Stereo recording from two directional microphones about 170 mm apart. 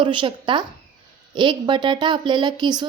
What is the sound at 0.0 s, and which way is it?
Speech, 30° right (ahead or behind).